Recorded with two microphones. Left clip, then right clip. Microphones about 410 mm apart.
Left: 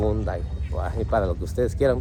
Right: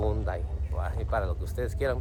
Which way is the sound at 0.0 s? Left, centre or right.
Centre.